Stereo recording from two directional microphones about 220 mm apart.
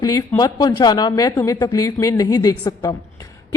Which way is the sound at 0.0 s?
15° left (ahead or behind).